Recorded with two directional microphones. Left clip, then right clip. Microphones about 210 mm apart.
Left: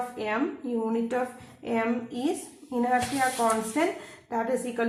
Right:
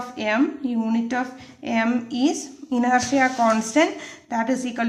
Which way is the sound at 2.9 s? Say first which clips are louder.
Right 6 dB; 55° right (ahead or behind).